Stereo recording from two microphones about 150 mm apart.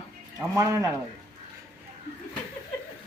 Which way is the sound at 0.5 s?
20° right (ahead or behind).